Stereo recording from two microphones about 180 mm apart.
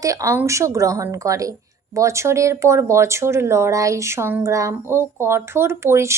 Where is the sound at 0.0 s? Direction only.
20° right (ahead or behind).